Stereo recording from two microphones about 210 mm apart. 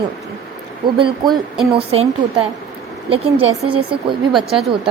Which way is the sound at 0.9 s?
25° right (ahead or behind).